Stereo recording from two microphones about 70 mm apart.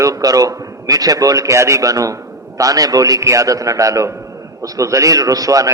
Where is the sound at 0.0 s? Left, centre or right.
Right.